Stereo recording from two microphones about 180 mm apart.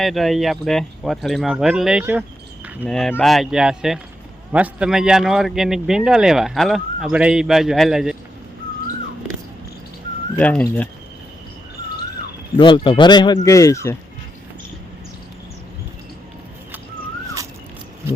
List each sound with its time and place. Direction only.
0.0 s speech: centre (ahead or behind)
2.8 s speech: 5° left (ahead or behind)
10.3 s speech: 10° left (ahead or behind)
12.5 s speech: 25° left (ahead or behind)